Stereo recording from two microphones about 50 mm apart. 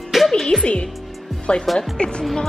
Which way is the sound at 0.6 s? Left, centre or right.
Centre.